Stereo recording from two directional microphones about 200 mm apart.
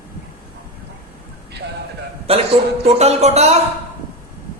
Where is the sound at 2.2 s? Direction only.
30° right (ahead or behind).